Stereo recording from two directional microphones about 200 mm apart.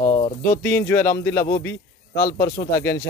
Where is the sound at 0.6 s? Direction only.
10° left (ahead or behind).